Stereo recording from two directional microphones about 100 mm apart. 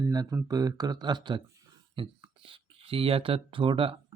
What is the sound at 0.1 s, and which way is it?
Speech, 40° right (ahead or behind).